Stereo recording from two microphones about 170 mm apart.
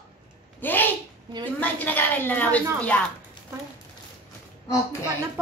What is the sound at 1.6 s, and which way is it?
A woman's voice, 10° left (ahead or behind).